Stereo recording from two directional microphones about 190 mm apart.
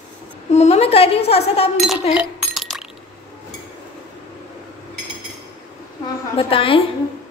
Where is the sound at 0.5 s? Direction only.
35° left (ahead or behind).